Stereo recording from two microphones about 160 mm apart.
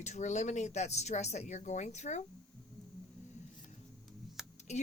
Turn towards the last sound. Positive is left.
turn(degrees=45)  # may be behind; listen again after turning